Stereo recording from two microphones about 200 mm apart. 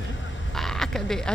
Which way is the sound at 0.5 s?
Centre (ahead or behind).